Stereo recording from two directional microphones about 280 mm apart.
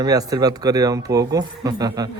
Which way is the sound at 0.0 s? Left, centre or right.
Centre.